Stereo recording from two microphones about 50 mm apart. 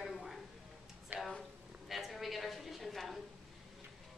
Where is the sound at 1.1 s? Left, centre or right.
Right.